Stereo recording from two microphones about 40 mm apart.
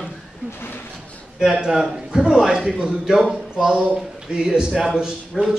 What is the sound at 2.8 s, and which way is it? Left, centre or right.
Speech, right.